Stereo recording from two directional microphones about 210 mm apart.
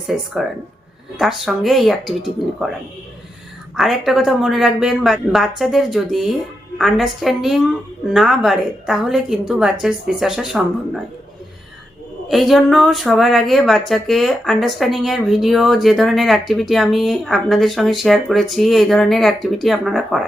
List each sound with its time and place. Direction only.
0.1 s speech: centre (ahead or behind)
3.8 s speech: centre (ahead or behind)
12.3 s speech: centre (ahead or behind)